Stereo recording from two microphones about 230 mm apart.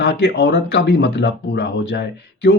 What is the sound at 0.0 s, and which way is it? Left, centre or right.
Speech, left.